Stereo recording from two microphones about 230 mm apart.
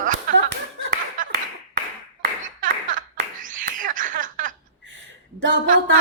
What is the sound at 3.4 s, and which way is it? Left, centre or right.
Laughter, right.